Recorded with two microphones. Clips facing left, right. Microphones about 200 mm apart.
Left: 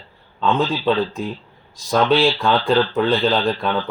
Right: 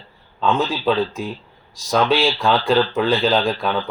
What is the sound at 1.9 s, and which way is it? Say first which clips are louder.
Speech: left 2 dB; centre (ahead or behind).